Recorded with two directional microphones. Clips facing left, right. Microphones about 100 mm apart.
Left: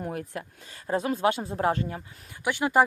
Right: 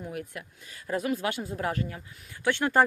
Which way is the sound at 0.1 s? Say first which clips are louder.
Left 3 dB; 35° left (ahead or behind).